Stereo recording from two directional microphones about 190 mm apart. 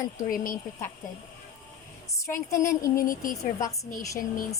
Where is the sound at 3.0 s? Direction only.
45° left (ahead or behind).